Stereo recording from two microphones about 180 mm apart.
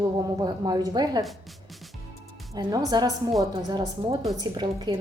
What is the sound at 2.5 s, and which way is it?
A woman's voice, 20° right (ahead or behind).